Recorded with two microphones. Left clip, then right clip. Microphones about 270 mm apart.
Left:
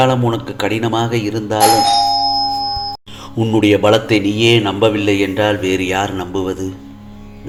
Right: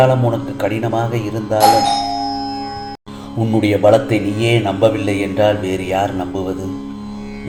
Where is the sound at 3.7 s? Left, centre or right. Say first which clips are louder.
Right 1 dB; left.